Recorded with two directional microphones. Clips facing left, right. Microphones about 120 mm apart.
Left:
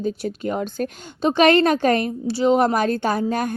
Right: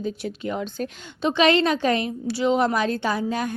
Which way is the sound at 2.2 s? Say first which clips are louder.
Left 3 dB; 30° left (ahead or behind).